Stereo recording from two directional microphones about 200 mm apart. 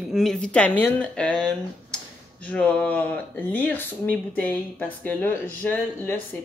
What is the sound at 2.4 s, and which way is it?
Speech, 5° left (ahead or behind).